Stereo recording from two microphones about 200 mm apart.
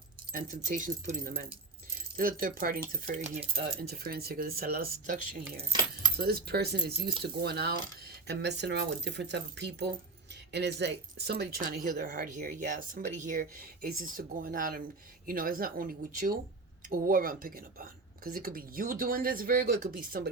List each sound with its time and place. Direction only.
0.3 s speech: 40° right (ahead or behind)
3.8 s speech: 50° right (ahead or behind)